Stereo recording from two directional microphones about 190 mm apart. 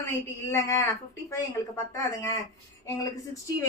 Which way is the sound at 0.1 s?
15° left (ahead or behind).